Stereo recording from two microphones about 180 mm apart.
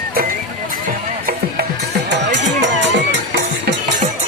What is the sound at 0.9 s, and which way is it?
Music, 55° right (ahead or behind).